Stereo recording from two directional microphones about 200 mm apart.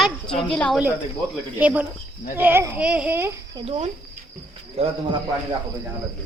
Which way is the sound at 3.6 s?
30° right (ahead or behind).